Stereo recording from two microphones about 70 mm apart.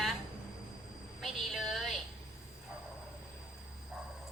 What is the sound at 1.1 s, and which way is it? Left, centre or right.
Speech, centre.